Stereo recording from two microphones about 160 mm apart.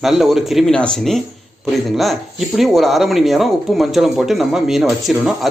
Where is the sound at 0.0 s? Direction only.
Centre (ahead or behind).